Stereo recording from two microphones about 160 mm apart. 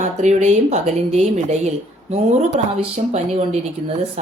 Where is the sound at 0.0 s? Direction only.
50° right (ahead or behind).